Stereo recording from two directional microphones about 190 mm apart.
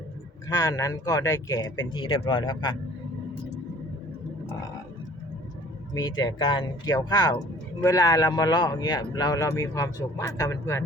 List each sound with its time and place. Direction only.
0.4 s speech: 20° left (ahead or behind)
5.9 s speech: 20° left (ahead or behind)